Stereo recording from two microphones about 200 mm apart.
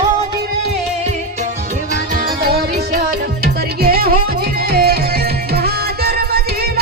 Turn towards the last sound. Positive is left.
turn(degrees=-50)  # may be behind; listen again after turning